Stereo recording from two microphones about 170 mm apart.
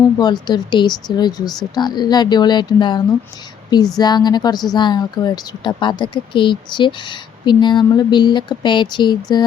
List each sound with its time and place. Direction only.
0.2 s speech: 25° left (ahead or behind)